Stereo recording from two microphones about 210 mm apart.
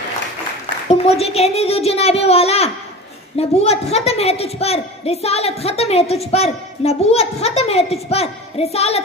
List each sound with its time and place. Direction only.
0.8 s a woman's voice: 30° left (ahead or behind)